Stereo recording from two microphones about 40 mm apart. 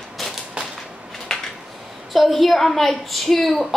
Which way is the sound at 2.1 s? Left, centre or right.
Centre.